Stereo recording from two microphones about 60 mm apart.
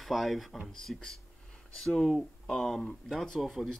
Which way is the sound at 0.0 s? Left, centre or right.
Centre.